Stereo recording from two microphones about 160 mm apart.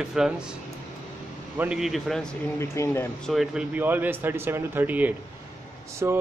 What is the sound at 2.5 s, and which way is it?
Speech, 15° left (ahead or behind).